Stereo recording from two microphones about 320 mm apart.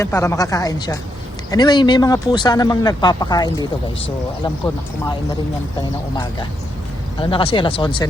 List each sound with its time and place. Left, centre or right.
0.0 s speech: centre
7.2 s speech: centre